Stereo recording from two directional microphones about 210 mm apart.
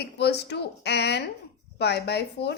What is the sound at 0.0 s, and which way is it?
A woman's voice, 50° left (ahead or behind).